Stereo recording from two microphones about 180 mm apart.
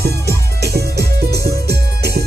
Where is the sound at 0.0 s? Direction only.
60° right (ahead or behind).